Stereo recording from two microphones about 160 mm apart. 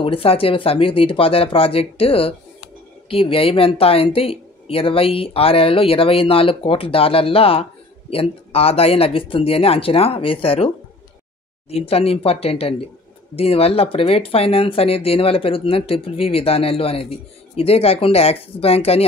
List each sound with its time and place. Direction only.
0.0 s speech: 35° left (ahead or behind)
11.7 s speech: 35° left (ahead or behind)